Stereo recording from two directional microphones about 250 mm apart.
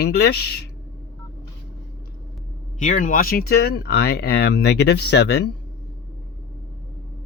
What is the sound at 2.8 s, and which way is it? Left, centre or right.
Speech, left.